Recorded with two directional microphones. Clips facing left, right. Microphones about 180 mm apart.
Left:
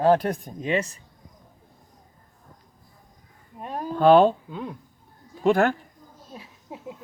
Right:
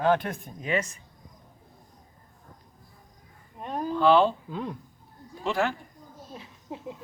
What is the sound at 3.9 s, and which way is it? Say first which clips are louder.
Speech: left 5 dB; 50° left (ahead or behind).